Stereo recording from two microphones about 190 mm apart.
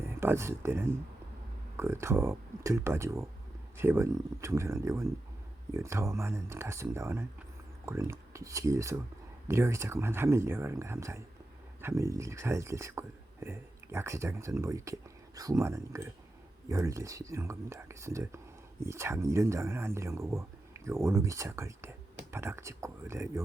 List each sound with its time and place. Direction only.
0.0 s speech: 15° right (ahead or behind)